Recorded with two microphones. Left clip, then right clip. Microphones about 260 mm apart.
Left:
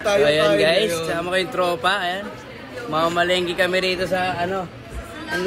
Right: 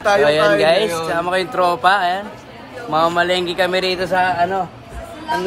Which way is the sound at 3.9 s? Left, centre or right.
Centre.